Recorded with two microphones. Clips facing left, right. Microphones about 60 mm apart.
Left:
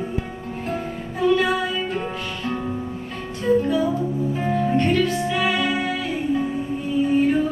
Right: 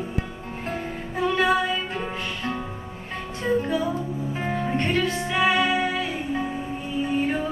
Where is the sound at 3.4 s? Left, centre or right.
Centre.